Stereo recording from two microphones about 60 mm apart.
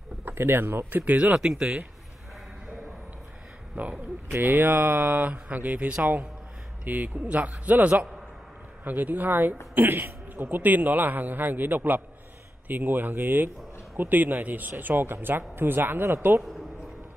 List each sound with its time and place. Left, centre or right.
0.2 s speech: right
1.0 s speech: centre
3.7 s a man's voice: right
16.4 s a sound: centre